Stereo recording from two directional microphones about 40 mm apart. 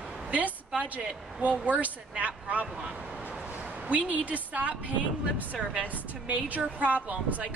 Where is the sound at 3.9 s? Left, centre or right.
Right.